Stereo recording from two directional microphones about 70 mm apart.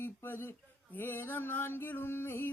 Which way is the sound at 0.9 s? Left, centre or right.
Left.